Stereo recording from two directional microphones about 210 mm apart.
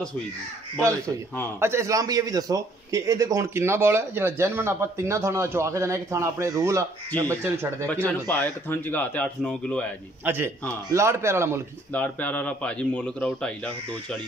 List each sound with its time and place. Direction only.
0.7 s a man's voice: 15° right (ahead or behind)
8.3 s speech: 10° left (ahead or behind)
10.2 s a man's voice: 10° right (ahead or behind)
11.9 s speech: 5° left (ahead or behind)